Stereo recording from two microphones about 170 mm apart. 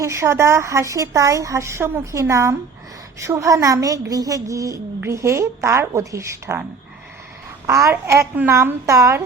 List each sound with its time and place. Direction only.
0.0 s a woman's voice: 15° right (ahead or behind)
7.7 s a woman's voice: 15° right (ahead or behind)